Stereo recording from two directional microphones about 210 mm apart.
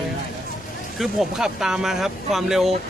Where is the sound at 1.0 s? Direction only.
Centre (ahead or behind).